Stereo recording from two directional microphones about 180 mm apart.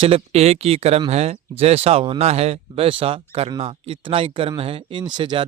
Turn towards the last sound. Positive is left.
turn(degrees=-25)  # may be behind; listen again after turning